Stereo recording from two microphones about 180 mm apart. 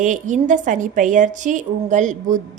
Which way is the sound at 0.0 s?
45° right (ahead or behind).